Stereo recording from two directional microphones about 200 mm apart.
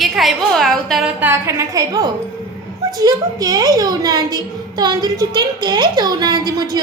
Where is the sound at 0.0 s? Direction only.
Centre (ahead or behind).